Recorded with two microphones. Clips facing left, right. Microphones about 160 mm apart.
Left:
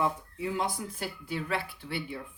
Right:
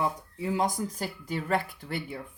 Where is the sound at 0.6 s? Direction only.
45° right (ahead or behind).